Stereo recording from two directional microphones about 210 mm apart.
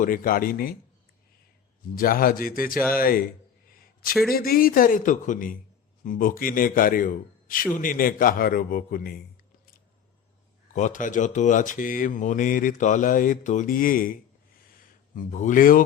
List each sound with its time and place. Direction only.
0.0 s a man's voice: 40° left (ahead or behind)
2.0 s a man's voice: 45° left (ahead or behind)
3.7 s a sound: 45° left (ahead or behind)
4.3 s speech: 45° left (ahead or behind)
10.8 s a man's voice: 40° left (ahead or behind)